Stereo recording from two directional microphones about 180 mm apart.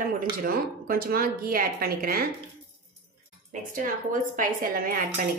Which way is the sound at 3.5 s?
45° right (ahead or behind).